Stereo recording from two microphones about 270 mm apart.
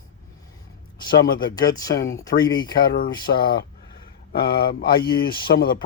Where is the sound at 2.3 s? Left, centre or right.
Left.